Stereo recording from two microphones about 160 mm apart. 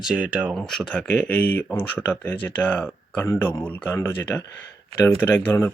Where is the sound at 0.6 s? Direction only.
5° left (ahead or behind).